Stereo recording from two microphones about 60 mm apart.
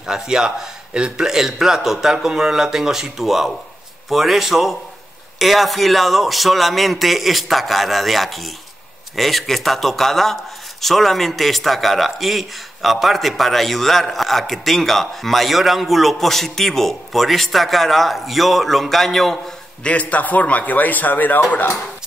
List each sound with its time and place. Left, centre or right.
0.0 s a man's voice: centre
19.8 s a man's voice: left